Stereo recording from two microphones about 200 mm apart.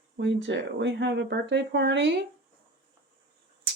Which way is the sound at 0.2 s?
65° right (ahead or behind).